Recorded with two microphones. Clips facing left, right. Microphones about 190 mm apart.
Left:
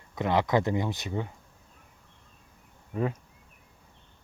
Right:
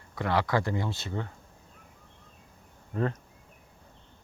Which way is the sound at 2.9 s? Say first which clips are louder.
Even; 5° left (ahead or behind).